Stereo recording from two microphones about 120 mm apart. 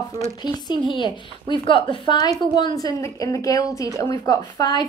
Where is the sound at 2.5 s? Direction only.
35° left (ahead or behind).